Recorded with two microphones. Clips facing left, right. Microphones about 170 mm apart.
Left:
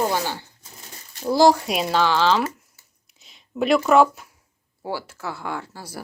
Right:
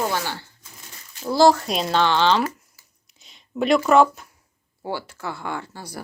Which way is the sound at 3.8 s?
5° left (ahead or behind).